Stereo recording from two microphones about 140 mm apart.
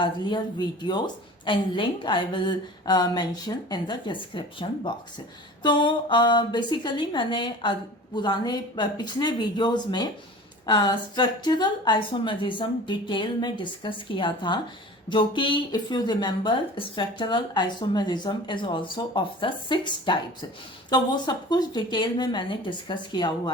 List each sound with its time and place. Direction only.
0.8 s speech: 30° left (ahead or behind)